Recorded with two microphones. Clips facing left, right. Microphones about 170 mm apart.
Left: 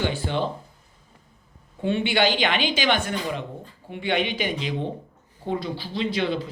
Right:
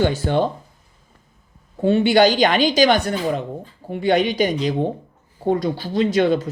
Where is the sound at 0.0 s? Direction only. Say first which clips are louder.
Right 7 dB; 45° right (ahead or behind).